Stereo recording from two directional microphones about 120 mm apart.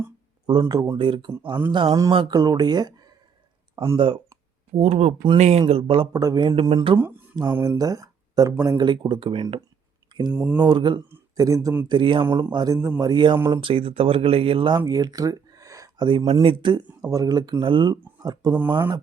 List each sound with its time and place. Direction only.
0.6 s a man's voice: 30° right (ahead or behind)
0.9 s speech: 45° right (ahead or behind)
4.8 s speech: 60° right (ahead or behind)
6.1 s a man's voice: 30° right (ahead or behind); by 9.6 s 50° right (ahead or behind)
10.1 s a sound: 40° right (ahead or behind)
10.3 s speech: 10° right (ahead or behind)
10.6 s speech: 40° right (ahead or behind)
11.3 s a man's voice: 25° right (ahead or behind)
11.9 s speech: 45° right (ahead or behind)
16.2 s speech: 55° right (ahead or behind)
17.0 s speech: 30° right (ahead or behind)